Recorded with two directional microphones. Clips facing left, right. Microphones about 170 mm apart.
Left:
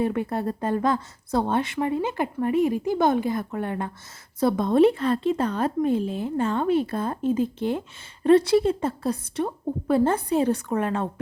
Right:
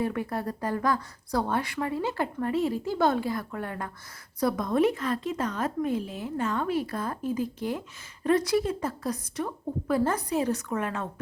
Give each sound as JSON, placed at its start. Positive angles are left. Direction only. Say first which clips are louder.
{"t": 0.0, "sound": "speech", "louder": "left 4 dB", "side_deg": 25}